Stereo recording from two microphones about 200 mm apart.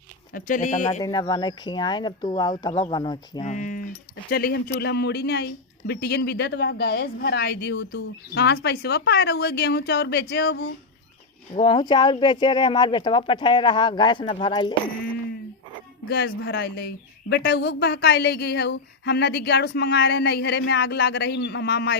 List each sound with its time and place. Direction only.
0.3 s speech: 40° left (ahead or behind)
1.0 s speech: 20° left (ahead or behind)
3.4 s speech: 40° left (ahead or behind); by 10.7 s 60° left (ahead or behind)
11.5 s speech: 25° left (ahead or behind)
16.0 s speech: 50° left (ahead or behind)